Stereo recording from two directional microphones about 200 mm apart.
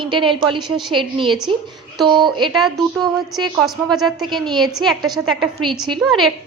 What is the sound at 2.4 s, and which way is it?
A woman's voice, centre (ahead or behind).